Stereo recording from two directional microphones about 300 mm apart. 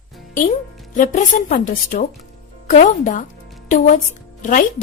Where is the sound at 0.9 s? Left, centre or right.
Left.